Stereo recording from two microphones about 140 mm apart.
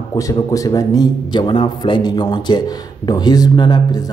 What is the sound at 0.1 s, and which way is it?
A man's voice, 25° left (ahead or behind).